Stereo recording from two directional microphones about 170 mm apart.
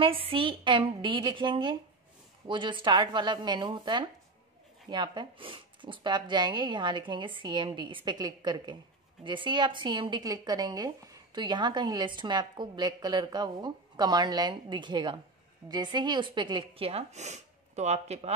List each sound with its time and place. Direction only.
0.0 s speech: 30° right (ahead or behind)